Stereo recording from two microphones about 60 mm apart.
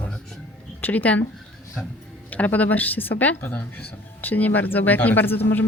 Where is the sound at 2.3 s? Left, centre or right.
Left.